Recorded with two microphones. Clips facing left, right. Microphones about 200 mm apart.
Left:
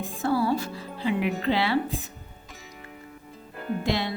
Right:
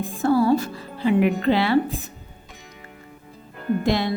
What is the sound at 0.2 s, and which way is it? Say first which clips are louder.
Music: right 6 dB; 45° right (ahead or behind).